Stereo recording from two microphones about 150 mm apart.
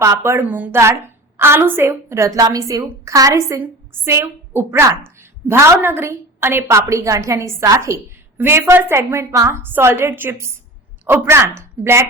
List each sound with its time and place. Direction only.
0.0 s a woman's voice: 20° right (ahead or behind)